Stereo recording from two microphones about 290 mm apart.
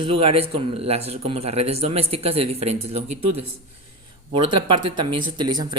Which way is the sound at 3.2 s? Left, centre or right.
Right.